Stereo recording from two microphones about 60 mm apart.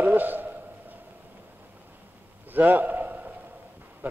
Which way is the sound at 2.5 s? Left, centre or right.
Right.